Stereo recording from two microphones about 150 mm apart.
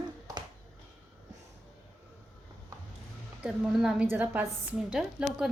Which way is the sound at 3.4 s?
5° right (ahead or behind).